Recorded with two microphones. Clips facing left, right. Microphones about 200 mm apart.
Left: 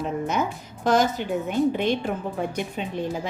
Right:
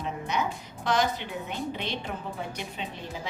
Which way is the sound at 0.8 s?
45° left (ahead or behind).